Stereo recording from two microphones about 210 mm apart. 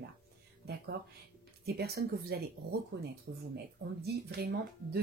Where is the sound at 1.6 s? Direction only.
50° right (ahead or behind).